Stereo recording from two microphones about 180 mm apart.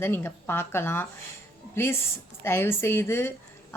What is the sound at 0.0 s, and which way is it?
A woman's voice, 10° left (ahead or behind).